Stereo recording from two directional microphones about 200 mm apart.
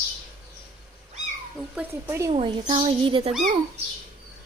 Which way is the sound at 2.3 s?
25° right (ahead or behind).